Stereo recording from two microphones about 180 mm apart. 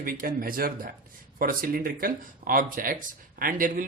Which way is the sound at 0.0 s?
50° right (ahead or behind).